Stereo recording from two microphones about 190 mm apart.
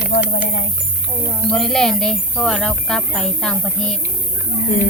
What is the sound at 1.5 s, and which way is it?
Speech, centre (ahead or behind).